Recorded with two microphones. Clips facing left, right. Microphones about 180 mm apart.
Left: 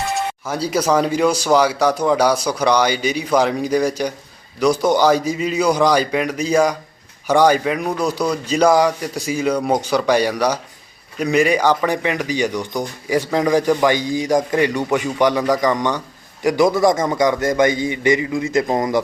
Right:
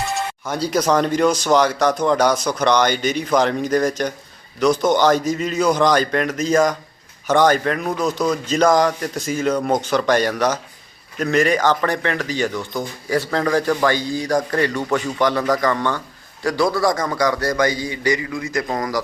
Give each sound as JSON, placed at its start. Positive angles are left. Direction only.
{"t": 0.0, "sound": "music", "side_deg": 0}
{"t": 0.7, "sound": "a man's voice", "side_deg": 5}